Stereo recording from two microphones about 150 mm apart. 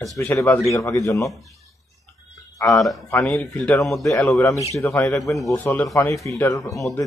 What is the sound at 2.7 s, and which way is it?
Speech, centre (ahead or behind).